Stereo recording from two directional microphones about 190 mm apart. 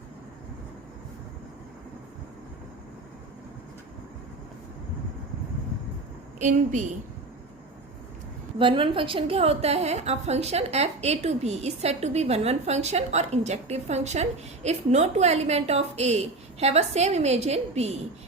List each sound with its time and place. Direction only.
6.4 s a woman's voice: 40° right (ahead or behind)
8.5 s a woman's voice: 25° right (ahead or behind)